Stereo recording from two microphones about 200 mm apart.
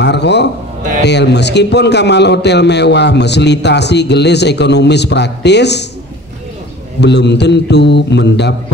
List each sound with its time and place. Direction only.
0.0 s a man's voice: 60° left (ahead or behind)
7.0 s a man's voice: 60° left (ahead or behind)